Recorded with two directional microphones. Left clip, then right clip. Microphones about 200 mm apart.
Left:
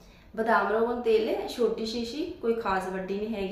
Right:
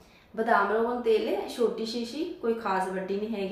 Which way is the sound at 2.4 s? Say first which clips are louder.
Even; centre (ahead or behind).